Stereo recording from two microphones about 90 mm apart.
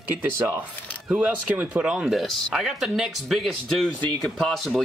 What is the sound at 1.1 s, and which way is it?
Speech, 15° right (ahead or behind).